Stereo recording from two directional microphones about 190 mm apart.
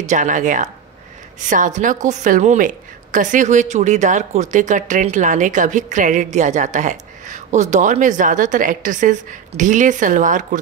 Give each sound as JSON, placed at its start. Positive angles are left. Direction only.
{"t": 0.1, "sound": "a woman's voice", "side_deg": -40}